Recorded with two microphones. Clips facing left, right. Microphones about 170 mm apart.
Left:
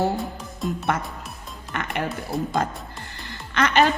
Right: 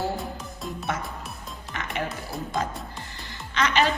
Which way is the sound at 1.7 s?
55° left (ahead or behind).